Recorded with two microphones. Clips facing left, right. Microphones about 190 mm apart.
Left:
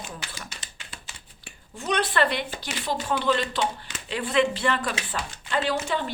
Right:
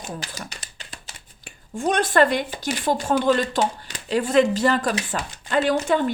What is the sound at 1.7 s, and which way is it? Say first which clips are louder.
Speech: right 6 dB; 45° right (ahead or behind).